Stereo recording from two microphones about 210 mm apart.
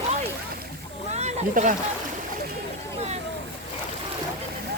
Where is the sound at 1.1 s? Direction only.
35° right (ahead or behind).